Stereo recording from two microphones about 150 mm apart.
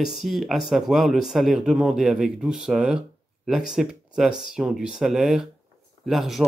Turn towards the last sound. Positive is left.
turn(degrees=0)  # may be behind; listen again after turning